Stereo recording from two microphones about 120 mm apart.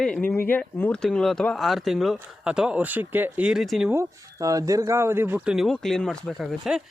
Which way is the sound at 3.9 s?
25° right (ahead or behind).